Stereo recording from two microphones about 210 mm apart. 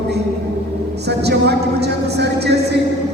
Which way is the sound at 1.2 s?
50° right (ahead or behind).